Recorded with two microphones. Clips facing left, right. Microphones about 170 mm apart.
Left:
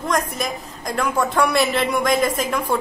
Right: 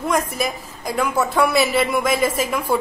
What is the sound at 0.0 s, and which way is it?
A woman's voice, 5° right (ahead or behind).